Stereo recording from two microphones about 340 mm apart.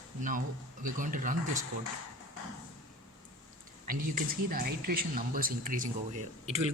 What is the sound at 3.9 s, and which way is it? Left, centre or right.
A man's voice, right.